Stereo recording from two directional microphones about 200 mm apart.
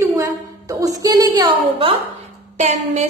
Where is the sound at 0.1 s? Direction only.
15° right (ahead or behind).